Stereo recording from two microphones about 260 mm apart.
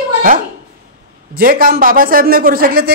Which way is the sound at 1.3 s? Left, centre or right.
Right.